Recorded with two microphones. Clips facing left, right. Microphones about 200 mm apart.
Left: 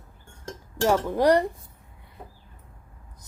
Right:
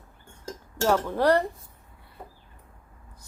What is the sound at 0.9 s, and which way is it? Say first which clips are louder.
Speech: left 2 dB; 15° left (ahead or behind).